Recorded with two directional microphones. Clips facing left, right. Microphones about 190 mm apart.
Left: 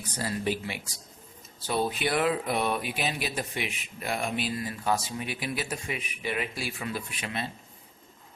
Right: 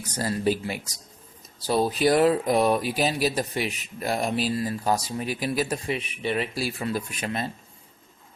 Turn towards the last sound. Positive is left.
turn(degrees=-40)  # may be behind; listen again after turning